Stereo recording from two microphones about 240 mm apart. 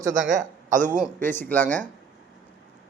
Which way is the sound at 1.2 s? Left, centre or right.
Centre.